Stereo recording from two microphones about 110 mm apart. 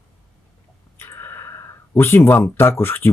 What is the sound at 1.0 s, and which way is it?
Speech, 20° left (ahead or behind).